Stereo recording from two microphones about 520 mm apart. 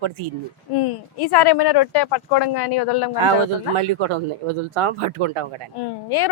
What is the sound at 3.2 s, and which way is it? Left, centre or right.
Speech, right.